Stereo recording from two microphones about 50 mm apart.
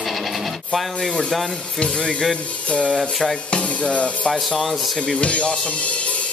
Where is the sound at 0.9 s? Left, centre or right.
Centre.